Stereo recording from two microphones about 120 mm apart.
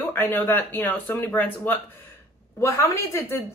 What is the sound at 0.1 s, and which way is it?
Speech, 15° left (ahead or behind).